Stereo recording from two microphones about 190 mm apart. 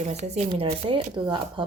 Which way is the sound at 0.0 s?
35° right (ahead or behind).